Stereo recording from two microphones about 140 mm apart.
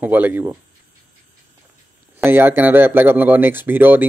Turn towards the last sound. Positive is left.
turn(degrees=-15)  # may be behind; listen again after turning